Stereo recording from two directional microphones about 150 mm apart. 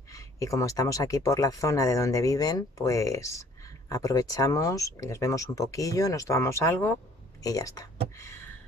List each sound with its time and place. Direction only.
0.1 s speech: 20° left (ahead or behind)